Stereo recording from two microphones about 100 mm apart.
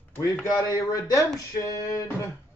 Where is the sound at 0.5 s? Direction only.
35° left (ahead or behind).